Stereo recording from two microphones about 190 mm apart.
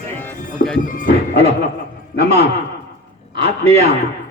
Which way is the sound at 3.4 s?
35° right (ahead or behind).